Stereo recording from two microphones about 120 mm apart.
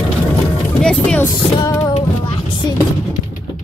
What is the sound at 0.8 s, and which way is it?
Vehicle, 10° left (ahead or behind).